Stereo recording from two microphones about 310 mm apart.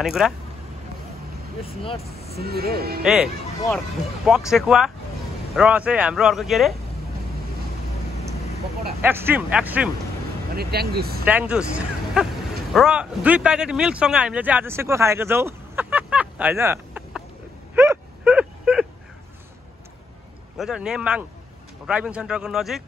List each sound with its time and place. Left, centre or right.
0.0 s speech: centre
2.3 s speech: right
3.0 s speech: centre
4.5 s speech: centre
9.0 s speech: centre
10.5 s speech: right
11.2 s speech: centre
17.7 s a sound: centre
20.5 s speech: centre